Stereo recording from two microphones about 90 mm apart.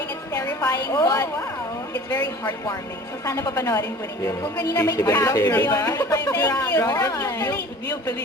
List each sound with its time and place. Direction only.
0.3 s a woman's voice: 40° left (ahead or behind)
3.6 s speech: 35° left (ahead or behind)
4.9 s a woman's voice: 45° left (ahead or behind)